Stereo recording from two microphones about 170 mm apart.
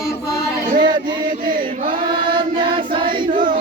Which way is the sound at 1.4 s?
55° right (ahead or behind).